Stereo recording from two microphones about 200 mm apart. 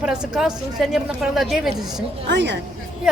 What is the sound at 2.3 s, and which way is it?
Speech, 60° right (ahead or behind).